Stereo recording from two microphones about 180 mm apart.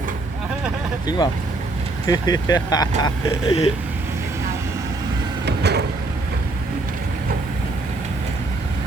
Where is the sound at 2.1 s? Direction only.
20° left (ahead or behind).